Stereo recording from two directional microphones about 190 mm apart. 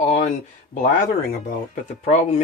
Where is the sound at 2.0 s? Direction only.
35° left (ahead or behind).